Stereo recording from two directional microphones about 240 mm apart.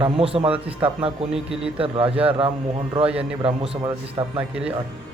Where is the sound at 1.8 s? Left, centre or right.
Right.